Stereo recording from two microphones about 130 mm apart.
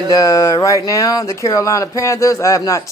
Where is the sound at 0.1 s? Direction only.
25° left (ahead or behind).